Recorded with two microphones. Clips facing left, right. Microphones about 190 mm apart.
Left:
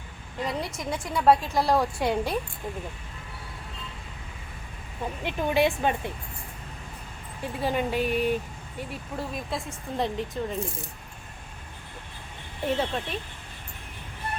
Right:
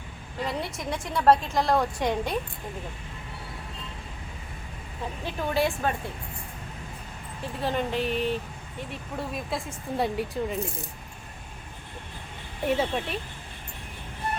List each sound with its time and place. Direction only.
0.4 s a woman's voice: centre (ahead or behind)
5.2 s speech: 15° left (ahead or behind)
7.6 s speech: 10° left (ahead or behind)
9.1 s a woman's voice: centre (ahead or behind)
12.7 s speech: 5° right (ahead or behind)